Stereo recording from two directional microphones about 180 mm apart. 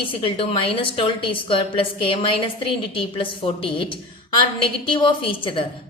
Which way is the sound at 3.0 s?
30° left (ahead or behind).